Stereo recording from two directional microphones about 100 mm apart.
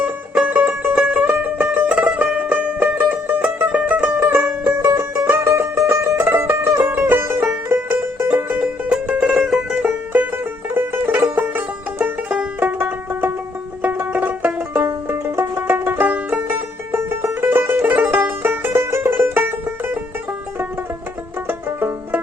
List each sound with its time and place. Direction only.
0.0 s music: 10° right (ahead or behind)
14.8 s music: 25° right (ahead or behind)
21.4 s banjo: 20° right (ahead or behind)